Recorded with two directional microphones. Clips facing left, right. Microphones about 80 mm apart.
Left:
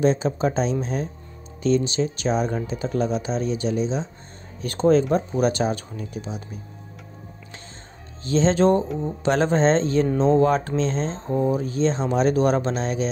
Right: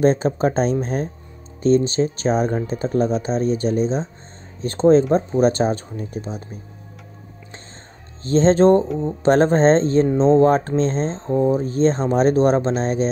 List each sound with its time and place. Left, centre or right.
0.0 s speech: right
4.6 s speech: right
8.2 s speech: right